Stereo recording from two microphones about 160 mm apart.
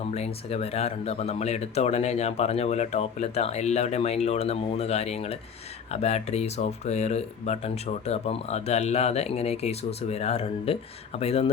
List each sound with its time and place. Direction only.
0.0 s speech: 40° left (ahead or behind)